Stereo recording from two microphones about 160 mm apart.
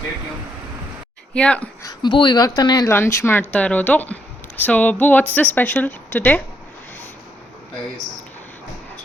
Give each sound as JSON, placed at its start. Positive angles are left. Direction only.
{"t": 1.3, "sound": "speech", "side_deg": 5}
{"t": 1.8, "sound": "speech", "side_deg": 25}